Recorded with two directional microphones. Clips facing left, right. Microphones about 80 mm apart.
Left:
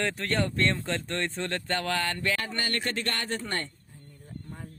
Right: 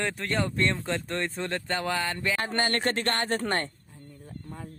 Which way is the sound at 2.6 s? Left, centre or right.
Right.